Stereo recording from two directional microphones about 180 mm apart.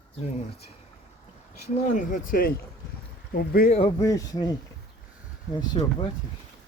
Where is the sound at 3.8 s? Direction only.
20° left (ahead or behind).